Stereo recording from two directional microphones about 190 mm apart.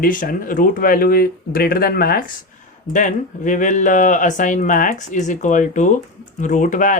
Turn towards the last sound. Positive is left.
turn(degrees=45)  # may be behind; listen again after turning